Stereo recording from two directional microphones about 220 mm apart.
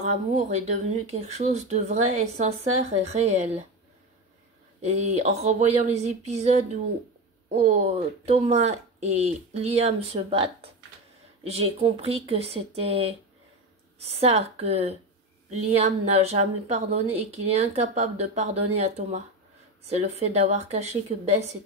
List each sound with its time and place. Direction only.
0.0 s speech: 30° right (ahead or behind)
4.8 s speech: 30° right (ahead or behind)